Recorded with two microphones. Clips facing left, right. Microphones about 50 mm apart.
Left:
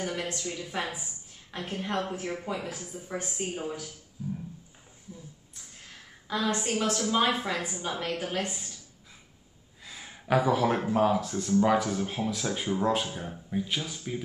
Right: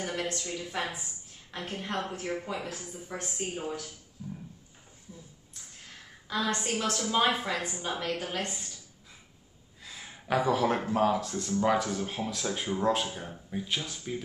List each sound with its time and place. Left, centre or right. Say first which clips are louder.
0.0 s a sound: even; centre
0.8 s a woman's voice: left 1 dB; centre
4.2 s music: left 6 dB; centre
6.2 s speech: left 2 dB; centre
9.8 s speech: left 3 dB; centre